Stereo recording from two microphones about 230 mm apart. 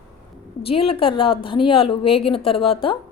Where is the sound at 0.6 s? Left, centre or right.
Left.